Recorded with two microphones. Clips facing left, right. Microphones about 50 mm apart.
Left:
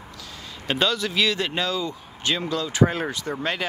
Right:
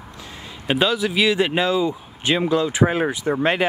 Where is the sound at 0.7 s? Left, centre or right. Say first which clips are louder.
Right 4 dB; centre.